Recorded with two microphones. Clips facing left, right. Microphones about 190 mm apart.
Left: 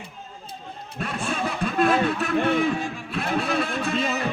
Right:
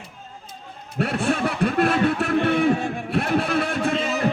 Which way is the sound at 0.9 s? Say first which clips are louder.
Right 6 dB; 75° right (ahead or behind).